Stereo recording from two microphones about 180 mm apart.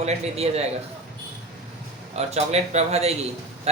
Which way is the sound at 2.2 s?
35° right (ahead or behind).